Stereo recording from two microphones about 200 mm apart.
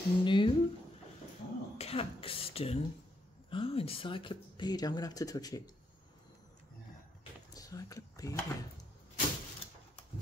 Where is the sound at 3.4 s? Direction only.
25° left (ahead or behind).